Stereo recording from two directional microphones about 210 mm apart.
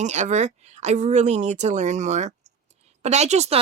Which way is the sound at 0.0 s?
35° right (ahead or behind).